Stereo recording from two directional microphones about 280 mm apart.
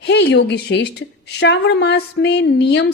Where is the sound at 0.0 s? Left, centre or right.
Left.